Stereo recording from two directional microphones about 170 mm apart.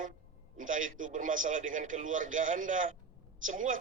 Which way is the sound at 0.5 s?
50° right (ahead or behind).